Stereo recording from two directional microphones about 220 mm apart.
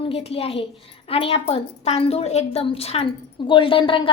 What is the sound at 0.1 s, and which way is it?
A woman's voice, 25° left (ahead or behind).